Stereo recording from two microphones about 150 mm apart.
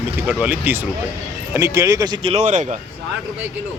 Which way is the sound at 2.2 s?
50° right (ahead or behind).